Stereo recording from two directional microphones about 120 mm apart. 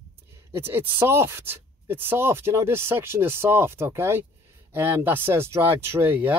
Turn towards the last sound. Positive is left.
turn(degrees=-15)  # may be behind; listen again after turning